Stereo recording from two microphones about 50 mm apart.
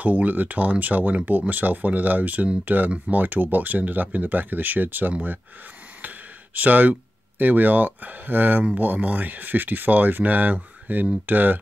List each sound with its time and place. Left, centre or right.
0.0 s speech: right